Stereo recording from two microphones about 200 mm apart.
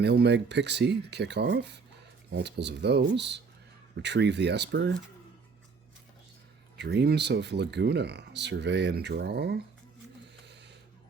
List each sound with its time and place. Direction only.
0.0 s speech: 55° right (ahead or behind)
6.7 s speech: 55° right (ahead or behind)
10.4 s a sound: 60° right (ahead or behind)